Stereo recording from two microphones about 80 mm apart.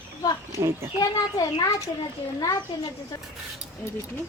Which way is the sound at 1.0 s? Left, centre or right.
Left.